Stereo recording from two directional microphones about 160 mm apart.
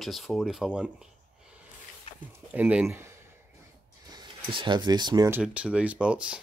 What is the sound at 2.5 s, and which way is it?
Speech, 10° right (ahead or behind).